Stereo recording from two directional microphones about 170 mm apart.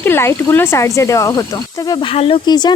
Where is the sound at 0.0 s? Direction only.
15° left (ahead or behind).